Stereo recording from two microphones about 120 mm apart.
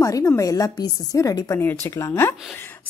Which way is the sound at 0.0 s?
25° left (ahead or behind).